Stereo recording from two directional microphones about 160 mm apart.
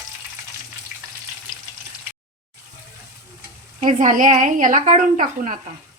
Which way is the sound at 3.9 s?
55° right (ahead or behind).